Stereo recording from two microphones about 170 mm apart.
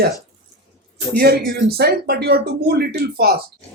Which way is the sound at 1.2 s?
65° right (ahead or behind).